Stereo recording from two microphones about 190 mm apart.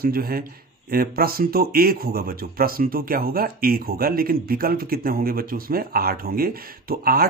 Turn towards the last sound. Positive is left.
turn(degrees=-50)  # may be behind; listen again after turning